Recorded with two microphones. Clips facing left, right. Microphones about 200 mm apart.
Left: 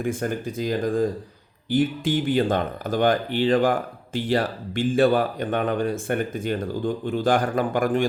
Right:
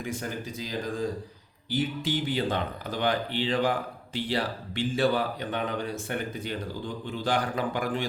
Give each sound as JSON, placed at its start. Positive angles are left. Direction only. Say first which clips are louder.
{"t": 0.0, "sound": "speech", "louder": "left 8 dB", "side_deg": 50}